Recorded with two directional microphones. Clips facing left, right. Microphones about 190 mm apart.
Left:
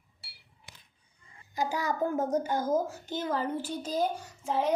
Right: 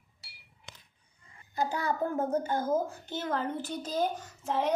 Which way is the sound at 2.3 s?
10° left (ahead or behind).